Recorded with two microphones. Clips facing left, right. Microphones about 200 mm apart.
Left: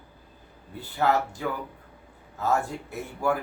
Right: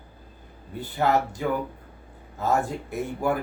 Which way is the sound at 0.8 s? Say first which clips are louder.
Right 1 dB; 20° right (ahead or behind).